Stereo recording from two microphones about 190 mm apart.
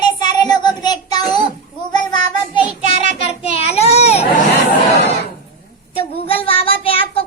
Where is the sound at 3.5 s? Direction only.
30° left (ahead or behind).